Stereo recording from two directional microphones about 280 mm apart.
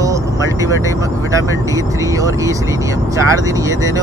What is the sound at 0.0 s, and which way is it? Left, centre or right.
Speech, centre.